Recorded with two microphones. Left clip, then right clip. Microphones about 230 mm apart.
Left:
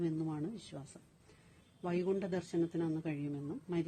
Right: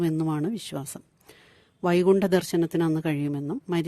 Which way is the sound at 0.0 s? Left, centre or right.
Right.